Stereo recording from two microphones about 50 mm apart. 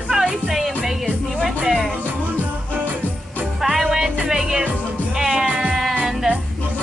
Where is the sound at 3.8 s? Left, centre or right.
Centre.